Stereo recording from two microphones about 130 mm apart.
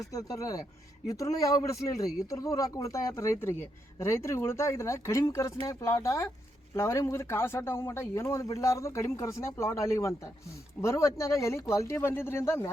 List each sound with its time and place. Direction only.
0.0 s speech: 25° left (ahead or behind)